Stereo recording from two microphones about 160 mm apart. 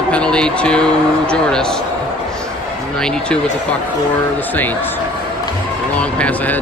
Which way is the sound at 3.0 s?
5° left (ahead or behind).